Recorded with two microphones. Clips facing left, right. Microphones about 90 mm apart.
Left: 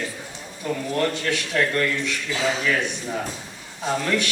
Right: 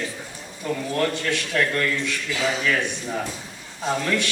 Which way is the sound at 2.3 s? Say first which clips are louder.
Even; 30° left (ahead or behind).